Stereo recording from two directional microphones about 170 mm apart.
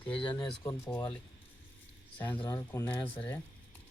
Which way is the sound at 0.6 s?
15° left (ahead or behind).